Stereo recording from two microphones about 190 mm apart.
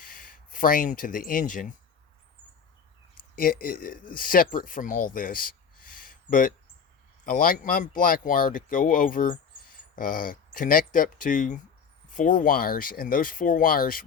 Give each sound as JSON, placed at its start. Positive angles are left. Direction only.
{"t": 0.0, "sound": "speech", "side_deg": 45}
{"t": 3.3, "sound": "speech", "side_deg": 50}